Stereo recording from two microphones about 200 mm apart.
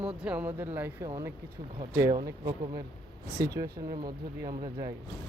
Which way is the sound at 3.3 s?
50° right (ahead or behind).